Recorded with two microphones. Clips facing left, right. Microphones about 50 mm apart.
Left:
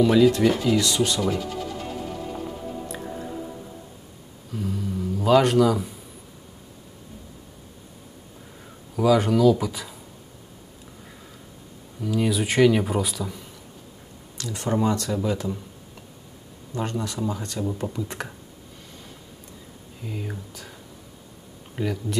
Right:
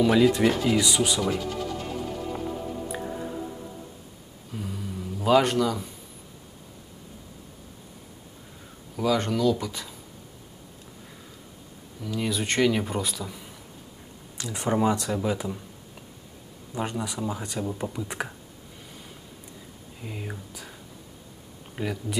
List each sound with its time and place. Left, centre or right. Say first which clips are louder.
0.0 s speech: left 2 dB; centre
4.5 s a sound: left 6 dB; centre
8.9 s speech: left 6 dB; centre
12.0 s speech: left 5 dB; centre
14.4 s speech: even; centre
16.7 s speech: left 2 dB; centre
20.0 s speech: left 3 dB; centre
21.8 s speech: left 3 dB; centre